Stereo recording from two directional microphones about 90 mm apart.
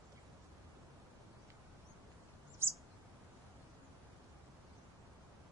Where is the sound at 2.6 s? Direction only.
25° right (ahead or behind).